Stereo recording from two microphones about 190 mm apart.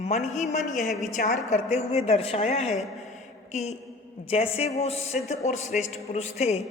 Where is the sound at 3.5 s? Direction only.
35° left (ahead or behind).